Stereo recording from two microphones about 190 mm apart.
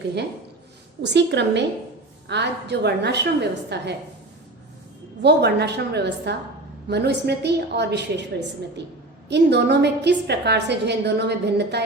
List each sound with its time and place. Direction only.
1.0 s a woman's voice: 65° right (ahead or behind)
5.2 s a woman's voice: 60° right (ahead or behind)